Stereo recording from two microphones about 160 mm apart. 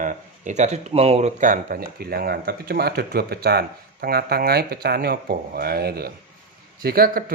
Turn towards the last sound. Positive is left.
turn(degrees=-65)  # may be behind; listen again after turning